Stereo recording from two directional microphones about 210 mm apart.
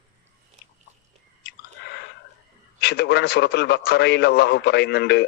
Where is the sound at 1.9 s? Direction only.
50° left (ahead or behind).